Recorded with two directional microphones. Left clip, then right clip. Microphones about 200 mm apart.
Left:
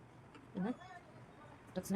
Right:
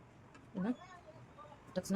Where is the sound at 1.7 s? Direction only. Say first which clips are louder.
Right 4 dB; 15° right (ahead or behind).